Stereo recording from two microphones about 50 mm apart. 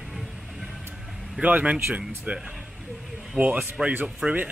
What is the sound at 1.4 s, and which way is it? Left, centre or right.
Speech, right.